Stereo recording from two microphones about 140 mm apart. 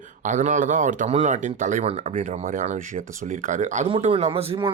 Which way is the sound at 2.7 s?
70° right (ahead or behind).